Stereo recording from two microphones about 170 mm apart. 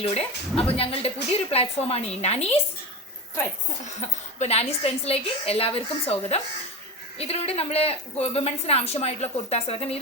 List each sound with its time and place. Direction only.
0.0 s a woman's voice: 35° left (ahead or behind)
3.8 s a woman's voice: 40° left (ahead or behind)